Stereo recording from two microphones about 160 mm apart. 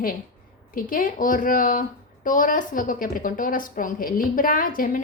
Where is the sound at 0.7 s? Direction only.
60° left (ahead or behind).